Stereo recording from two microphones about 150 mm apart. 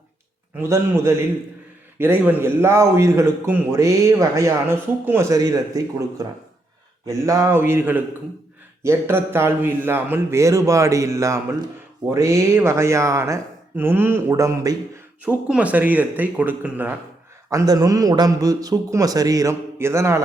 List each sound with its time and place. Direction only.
0.5 s a man's voice: 15° right (ahead or behind)
15.2 s a man's voice: 10° right (ahead or behind)
17.5 s a man's voice: 25° right (ahead or behind)